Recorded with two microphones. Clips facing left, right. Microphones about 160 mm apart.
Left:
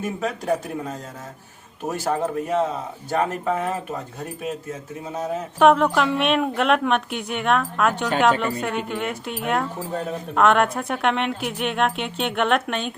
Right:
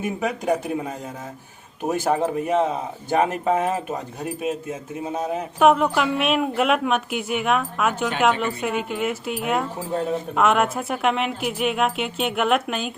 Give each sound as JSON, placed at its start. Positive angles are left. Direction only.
{"t": 0.0, "sound": "speech", "side_deg": -10}
{"t": 5.5, "sound": "speech", "side_deg": -5}